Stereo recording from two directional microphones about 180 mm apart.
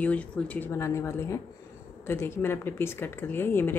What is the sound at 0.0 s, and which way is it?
Speech, 5° left (ahead or behind).